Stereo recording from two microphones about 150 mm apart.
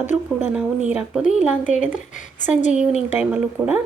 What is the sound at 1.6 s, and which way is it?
Speech, 55° left (ahead or behind).